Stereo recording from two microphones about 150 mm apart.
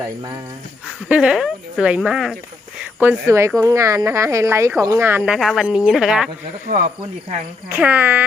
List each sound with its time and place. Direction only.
0.9 s speech: 5° right (ahead or behind)
3.0 s speech: 15° right (ahead or behind)
5.2 s speech: centre (ahead or behind)
7.7 s speech: 10° right (ahead or behind)